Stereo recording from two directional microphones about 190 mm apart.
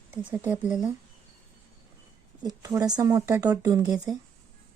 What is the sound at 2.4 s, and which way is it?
Speech, 20° right (ahead or behind).